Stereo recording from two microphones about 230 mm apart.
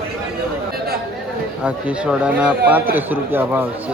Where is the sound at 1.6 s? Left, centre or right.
Centre.